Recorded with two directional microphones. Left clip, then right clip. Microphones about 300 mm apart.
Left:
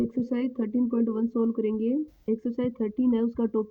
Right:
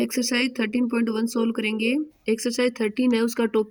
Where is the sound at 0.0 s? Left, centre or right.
Left.